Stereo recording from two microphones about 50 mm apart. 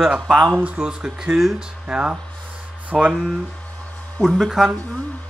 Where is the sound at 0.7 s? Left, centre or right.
Centre.